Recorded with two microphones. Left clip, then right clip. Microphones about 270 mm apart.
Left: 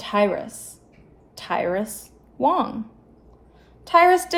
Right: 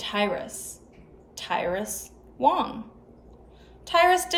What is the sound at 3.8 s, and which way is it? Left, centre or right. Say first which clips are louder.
Speech: left 5 dB; centre.